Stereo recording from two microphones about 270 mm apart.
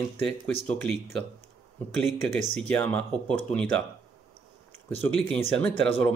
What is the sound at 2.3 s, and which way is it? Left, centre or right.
Speech, right.